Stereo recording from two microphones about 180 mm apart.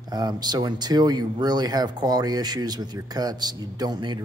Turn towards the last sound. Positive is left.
turn(degrees=-25)  # may be behind; listen again after turning